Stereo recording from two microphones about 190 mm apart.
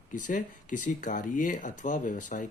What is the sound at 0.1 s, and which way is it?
Speech, 45° left (ahead or behind).